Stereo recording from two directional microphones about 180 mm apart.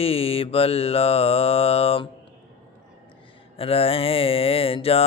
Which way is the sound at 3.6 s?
30° left (ahead or behind).